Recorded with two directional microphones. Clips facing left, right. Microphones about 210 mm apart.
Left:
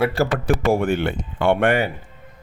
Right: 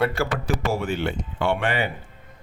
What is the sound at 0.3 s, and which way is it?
Speech, 55° left (ahead or behind).